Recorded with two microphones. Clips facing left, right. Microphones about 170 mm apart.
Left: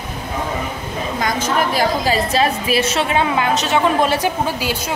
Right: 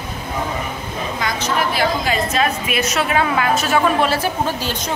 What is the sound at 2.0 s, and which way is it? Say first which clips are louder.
A woman's voice: left 2 dB; 35° left (ahead or behind).